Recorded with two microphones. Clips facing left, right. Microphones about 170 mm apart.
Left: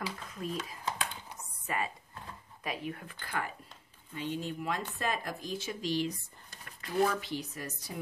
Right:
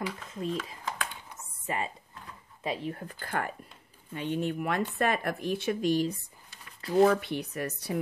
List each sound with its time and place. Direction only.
0.3 s a sound: 25° right (ahead or behind)
2.6 s speech: 30° right (ahead or behind); by 3.5 s 50° right (ahead or behind)
4.1 s speech: 60° right (ahead or behind)